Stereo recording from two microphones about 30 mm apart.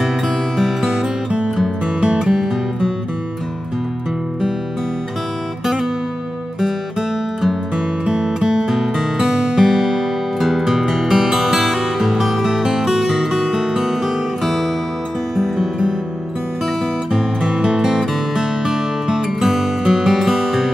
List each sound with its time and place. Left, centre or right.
0.6 s music: centre
2.0 s music: right
2.2 s music: centre
7.7 s music: right
8.6 s music: centre
12.6 s music: centre
17.1 s music: centre
17.6 s music: right; by 20.7 s centre